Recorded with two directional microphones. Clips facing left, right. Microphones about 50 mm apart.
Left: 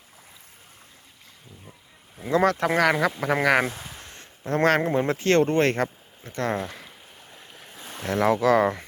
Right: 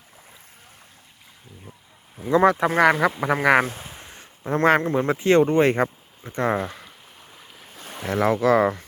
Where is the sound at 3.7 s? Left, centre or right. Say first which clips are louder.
Even; right.